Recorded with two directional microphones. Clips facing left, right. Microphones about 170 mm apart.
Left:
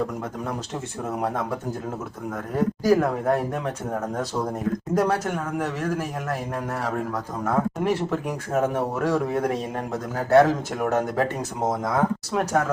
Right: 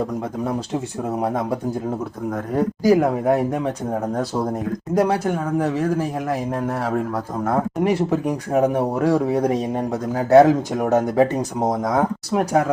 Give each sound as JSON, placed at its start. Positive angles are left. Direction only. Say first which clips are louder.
{"t": 2.8, "sound": "speech", "louder": "right 4 dB", "side_deg": -15}
{"t": 7.5, "sound": "speech", "louder": "right 3 dB", "side_deg": -15}